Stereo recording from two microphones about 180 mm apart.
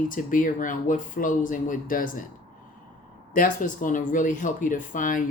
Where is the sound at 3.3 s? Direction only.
50° left (ahead or behind).